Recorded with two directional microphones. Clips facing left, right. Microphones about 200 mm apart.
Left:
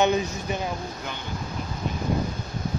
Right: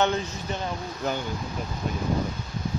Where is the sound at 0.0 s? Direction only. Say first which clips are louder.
Left 3 dB; 10° left (ahead or behind).